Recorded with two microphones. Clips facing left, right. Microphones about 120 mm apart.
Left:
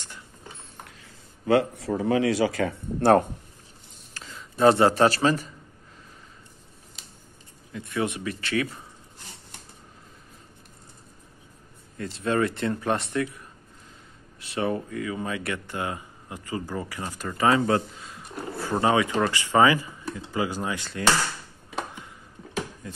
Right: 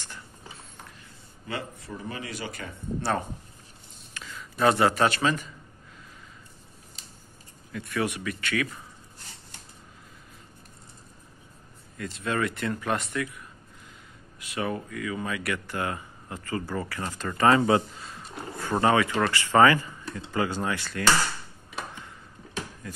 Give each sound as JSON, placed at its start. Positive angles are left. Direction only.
{"t": 0.8, "sound": "a man's voice", "side_deg": 90}
{"t": 3.0, "sound": "speech", "side_deg": 55}
{"t": 4.1, "sound": "speech", "side_deg": 30}
{"t": 7.7, "sound": "speech", "side_deg": 25}
{"t": 12.0, "sound": "speech", "side_deg": 30}
{"t": 14.4, "sound": "speech", "side_deg": 30}
{"t": 18.8, "sound": "speech", "side_deg": 15}
{"t": 22.8, "sound": "beatboxing", "side_deg": 25}